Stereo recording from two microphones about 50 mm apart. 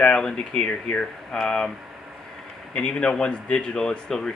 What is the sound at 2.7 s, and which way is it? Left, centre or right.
Speech, left.